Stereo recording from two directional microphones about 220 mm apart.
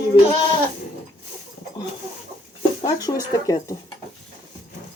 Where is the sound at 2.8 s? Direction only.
15° left (ahead or behind).